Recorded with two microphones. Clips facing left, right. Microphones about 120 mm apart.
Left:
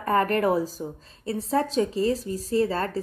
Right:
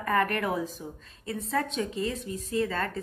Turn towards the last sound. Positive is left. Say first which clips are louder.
# left 5 dB
turn(degrees=35)  # may be behind; listen again after turning